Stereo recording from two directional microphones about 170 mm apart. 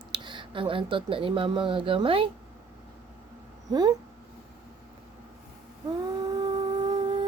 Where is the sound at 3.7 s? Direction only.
25° right (ahead or behind).